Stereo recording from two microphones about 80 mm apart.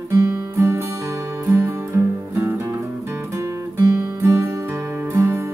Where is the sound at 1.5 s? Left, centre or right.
Right.